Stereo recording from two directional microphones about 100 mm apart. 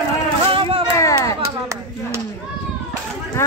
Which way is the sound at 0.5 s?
65° right (ahead or behind).